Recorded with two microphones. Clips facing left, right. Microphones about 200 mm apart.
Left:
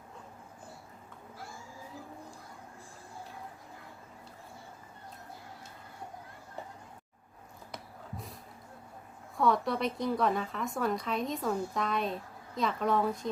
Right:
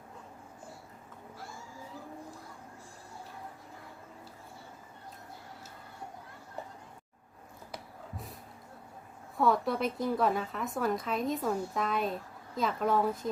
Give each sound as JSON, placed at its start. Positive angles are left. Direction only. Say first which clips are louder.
{"t": 9.4, "sound": "a woman's voice", "louder": "even", "side_deg": -5}